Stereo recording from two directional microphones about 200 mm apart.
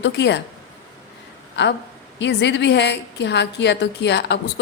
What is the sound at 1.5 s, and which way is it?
A woman's voice, 60° left (ahead or behind).